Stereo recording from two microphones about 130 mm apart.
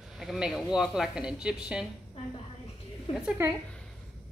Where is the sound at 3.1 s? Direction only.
40° left (ahead or behind).